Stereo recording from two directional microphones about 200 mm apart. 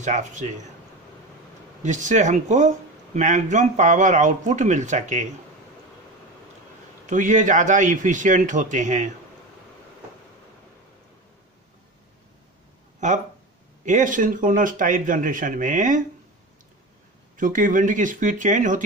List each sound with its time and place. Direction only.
0.0 s speech: 40° right (ahead or behind)
1.8 s speech: 40° right (ahead or behind)
7.1 s speech: 40° right (ahead or behind)
13.0 s speech: 40° right (ahead or behind)
17.4 s speech: 40° right (ahead or behind)